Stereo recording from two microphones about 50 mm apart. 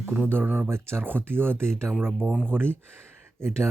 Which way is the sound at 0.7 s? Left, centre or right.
Right.